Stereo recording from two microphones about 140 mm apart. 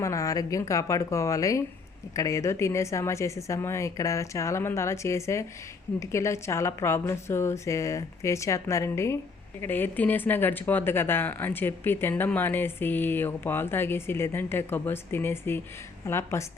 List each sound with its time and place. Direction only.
0.0 s speech: 25° left (ahead or behind)